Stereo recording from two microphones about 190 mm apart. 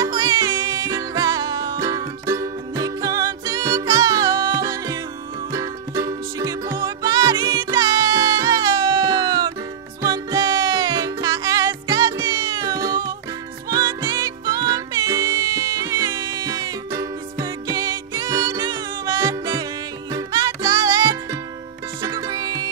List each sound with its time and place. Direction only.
0.0 s music: 20° right (ahead or behind)